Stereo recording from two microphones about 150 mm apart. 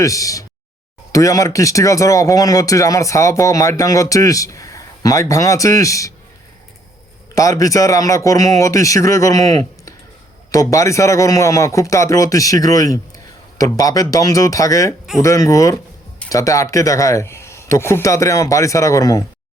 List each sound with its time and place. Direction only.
0.0 s speech: 20° left (ahead or behind)
7.3 s speech: 20° left (ahead or behind)